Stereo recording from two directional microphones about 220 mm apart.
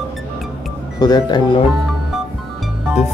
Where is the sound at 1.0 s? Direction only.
20° left (ahead or behind).